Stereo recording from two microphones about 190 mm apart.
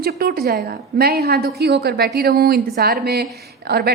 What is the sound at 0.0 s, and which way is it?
A woman's voice, 55° right (ahead or behind).